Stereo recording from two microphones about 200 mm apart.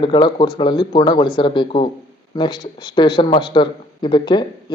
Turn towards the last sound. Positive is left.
turn(degrees=25)  # may be behind; listen again after turning